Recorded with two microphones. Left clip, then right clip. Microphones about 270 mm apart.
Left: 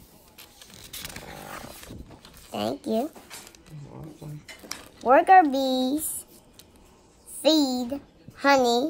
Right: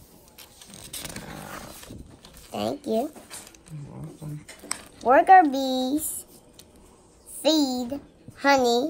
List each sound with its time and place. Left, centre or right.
0.6 s a sound: centre
2.5 s speech: centre
5.0 s speech: centre
7.4 s a child's voice: centre